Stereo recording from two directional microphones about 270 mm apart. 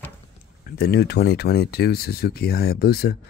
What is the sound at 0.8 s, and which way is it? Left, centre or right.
Speech, left.